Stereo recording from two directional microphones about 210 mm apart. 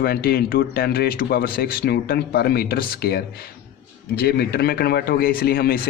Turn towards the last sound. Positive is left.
turn(degrees=45)  # may be behind; listen again after turning